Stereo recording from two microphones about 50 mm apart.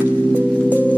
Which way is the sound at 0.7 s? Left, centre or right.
Right.